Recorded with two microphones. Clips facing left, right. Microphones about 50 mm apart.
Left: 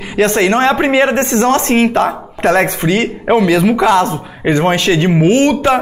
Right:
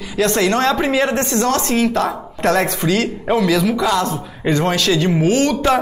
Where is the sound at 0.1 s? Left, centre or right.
Left.